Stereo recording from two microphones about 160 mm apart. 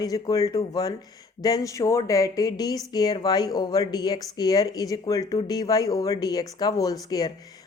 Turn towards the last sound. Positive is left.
turn(degrees=25)  # may be behind; listen again after turning